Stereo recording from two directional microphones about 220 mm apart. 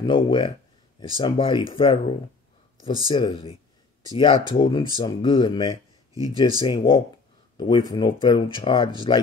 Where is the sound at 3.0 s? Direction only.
20° left (ahead or behind).